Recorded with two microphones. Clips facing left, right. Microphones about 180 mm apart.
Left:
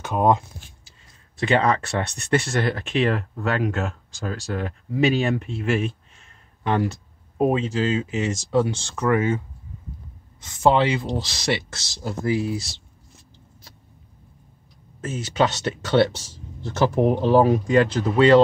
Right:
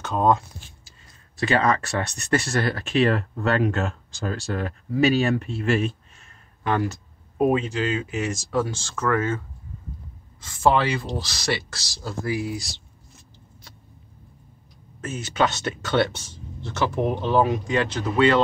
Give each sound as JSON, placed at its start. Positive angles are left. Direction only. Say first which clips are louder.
{"t": 0.0, "sound": "speech", "louder": "left 1 dB", "side_deg": 15}
{"t": 10.4, "sound": "speech", "louder": "left 2 dB", "side_deg": 20}
{"t": 15.0, "sound": "speech", "louder": "left 2 dB", "side_deg": 30}